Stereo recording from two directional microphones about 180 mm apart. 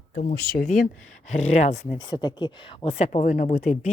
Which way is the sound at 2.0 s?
25° left (ahead or behind).